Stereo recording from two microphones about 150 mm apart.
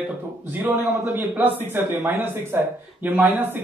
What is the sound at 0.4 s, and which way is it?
Speech, 15° right (ahead or behind).